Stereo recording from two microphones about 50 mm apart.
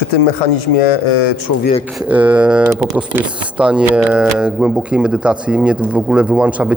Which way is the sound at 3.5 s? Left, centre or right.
Right.